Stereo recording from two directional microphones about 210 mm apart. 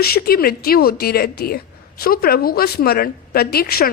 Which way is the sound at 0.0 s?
45° left (ahead or behind).